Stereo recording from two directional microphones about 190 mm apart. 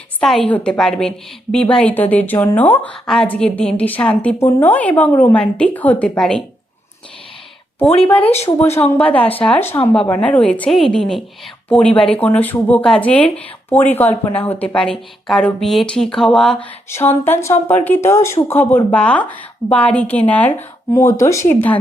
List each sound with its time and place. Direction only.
0.2 s a woman's voice: centre (ahead or behind)
8.2 s speech: 30° left (ahead or behind)
9.1 s a woman's voice: 10° left (ahead or behind)